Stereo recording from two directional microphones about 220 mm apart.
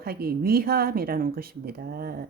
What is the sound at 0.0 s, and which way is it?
Speech, 45° right (ahead or behind).